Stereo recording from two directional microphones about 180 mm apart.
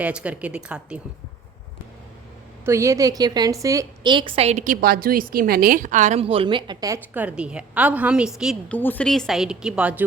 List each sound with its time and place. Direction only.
0.0 s speech: 5° right (ahead or behind)
2.6 s a woman's voice: 15° right (ahead or behind)
8.8 s speech: 10° left (ahead or behind); by 10.0 s 5° right (ahead or behind)